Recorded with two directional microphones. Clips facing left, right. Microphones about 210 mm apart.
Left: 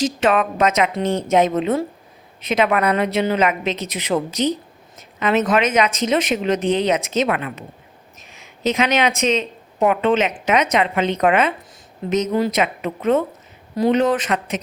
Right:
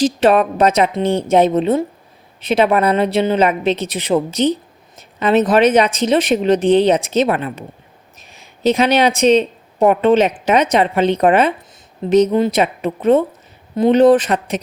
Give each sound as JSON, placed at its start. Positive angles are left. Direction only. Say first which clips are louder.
{"t": 0.0, "sound": "speech", "louder": "right 5 dB", "side_deg": -35}